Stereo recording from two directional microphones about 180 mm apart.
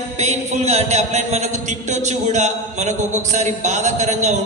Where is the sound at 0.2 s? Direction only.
40° right (ahead or behind).